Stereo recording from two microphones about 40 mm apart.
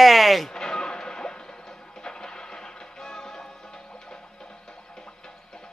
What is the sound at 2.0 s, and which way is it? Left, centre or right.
Music, centre.